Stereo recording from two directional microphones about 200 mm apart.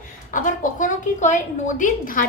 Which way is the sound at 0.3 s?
40° left (ahead or behind).